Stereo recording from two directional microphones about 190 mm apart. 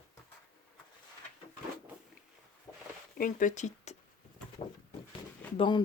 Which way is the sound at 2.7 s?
15° left (ahead or behind).